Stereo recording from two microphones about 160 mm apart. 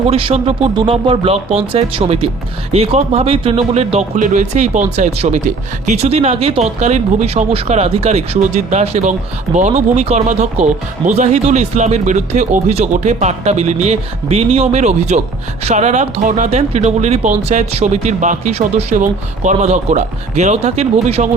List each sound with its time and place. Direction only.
0.1 s speech: 35° right (ahead or behind)